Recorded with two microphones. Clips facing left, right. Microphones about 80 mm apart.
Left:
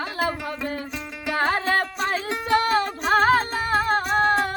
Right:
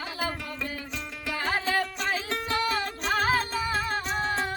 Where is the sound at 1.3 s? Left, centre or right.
Left.